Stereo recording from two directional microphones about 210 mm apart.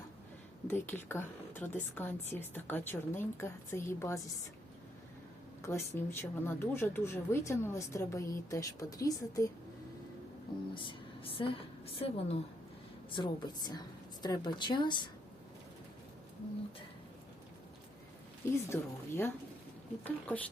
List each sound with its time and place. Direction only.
0.7 s a woman's voice: 10° left (ahead or behind)
5.6 s a woman's voice: 10° left (ahead or behind)
10.8 s a woman's voice: 25° left (ahead or behind)
18.7 s a woman's voice: 10° left (ahead or behind)